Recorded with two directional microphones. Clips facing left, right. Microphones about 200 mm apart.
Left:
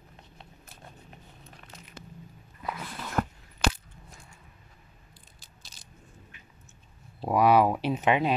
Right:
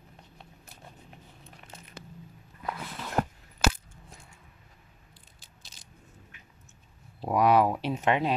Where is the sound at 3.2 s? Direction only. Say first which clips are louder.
Right 1 dB; 30° right (ahead or behind).